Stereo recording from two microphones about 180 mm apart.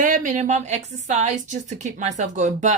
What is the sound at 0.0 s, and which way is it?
Speech, 45° right (ahead or behind).